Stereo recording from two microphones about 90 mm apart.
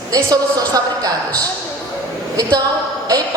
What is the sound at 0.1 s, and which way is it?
A woman's voice, 40° right (ahead or behind).